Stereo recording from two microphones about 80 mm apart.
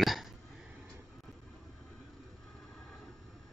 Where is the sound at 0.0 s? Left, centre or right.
Centre.